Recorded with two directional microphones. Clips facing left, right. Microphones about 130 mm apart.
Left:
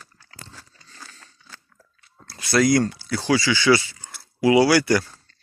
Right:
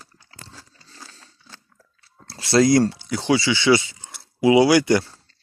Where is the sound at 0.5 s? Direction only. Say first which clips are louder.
Right 1 dB; 35° right (ahead or behind).